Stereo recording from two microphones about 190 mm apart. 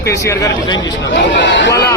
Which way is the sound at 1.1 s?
70° left (ahead or behind).